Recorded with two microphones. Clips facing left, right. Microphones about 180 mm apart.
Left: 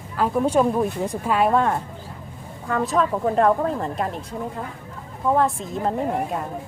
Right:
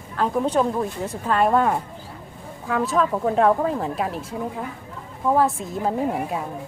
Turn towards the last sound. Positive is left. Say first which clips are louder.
# even
turn(degrees=-5)  # may be behind; listen again after turning